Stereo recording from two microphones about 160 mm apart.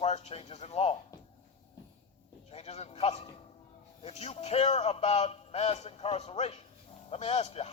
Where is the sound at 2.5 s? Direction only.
40° left (ahead or behind).